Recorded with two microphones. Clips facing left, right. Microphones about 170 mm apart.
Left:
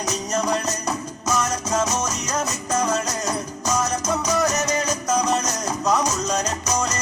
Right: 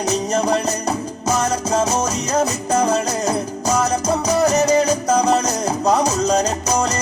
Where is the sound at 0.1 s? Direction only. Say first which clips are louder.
Right 5 dB; 30° right (ahead or behind).